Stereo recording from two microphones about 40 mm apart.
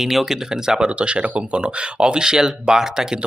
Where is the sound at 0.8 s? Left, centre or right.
Right.